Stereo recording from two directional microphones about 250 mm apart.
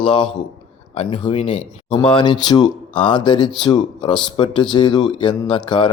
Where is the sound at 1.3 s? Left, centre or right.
Left.